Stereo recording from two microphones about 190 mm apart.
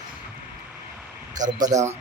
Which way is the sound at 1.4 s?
20° right (ahead or behind).